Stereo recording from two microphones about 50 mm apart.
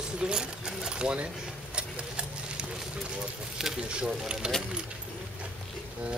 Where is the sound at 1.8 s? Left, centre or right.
Right.